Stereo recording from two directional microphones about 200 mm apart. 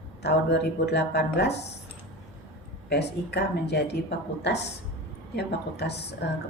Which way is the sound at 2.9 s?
55° left (ahead or behind).